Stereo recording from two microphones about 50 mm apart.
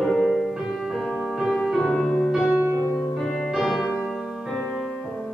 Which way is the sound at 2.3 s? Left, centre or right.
Centre.